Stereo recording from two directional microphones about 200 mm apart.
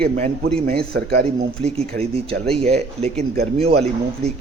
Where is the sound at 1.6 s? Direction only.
30° right (ahead or behind).